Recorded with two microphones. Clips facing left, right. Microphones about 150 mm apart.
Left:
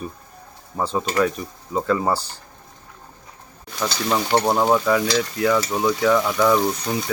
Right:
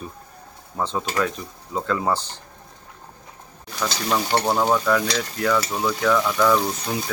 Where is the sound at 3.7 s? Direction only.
10° left (ahead or behind).